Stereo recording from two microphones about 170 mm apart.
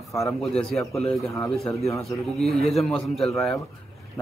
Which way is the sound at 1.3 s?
20° left (ahead or behind).